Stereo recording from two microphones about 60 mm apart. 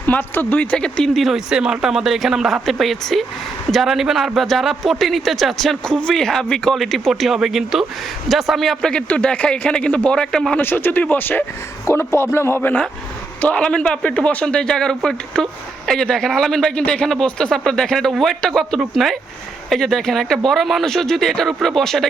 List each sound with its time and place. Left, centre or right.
0.0 s speech: left
0.7 s a man's voice: centre
1.1 s speech: centre
1.5 s speech: centre
9.0 s speech: left
10.6 s speech: left
11.9 s speech: left
13.4 s a man's voice: centre